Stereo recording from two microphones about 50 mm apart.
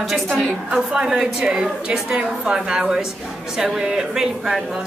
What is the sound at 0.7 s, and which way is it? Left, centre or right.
A woman's voice, centre.